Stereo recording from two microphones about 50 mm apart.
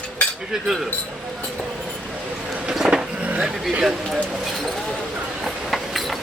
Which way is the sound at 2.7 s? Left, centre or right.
Centre.